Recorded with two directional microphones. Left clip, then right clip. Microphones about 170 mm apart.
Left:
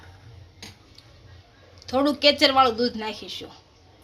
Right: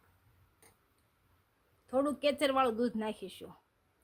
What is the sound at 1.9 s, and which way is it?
Speech, 45° right (ahead or behind).